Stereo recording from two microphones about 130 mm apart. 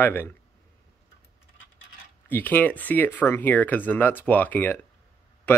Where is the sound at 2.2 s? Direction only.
15° left (ahead or behind).